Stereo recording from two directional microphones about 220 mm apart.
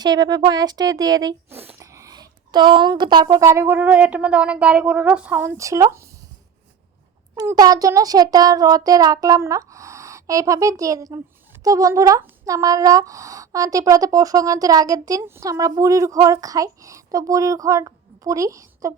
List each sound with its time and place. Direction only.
0.0 s speech: 15° right (ahead or behind)
7.3 s speech: 15° right (ahead or behind)